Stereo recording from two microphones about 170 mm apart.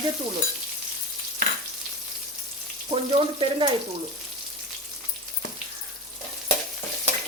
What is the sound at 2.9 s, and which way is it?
Speech, 30° right (ahead or behind).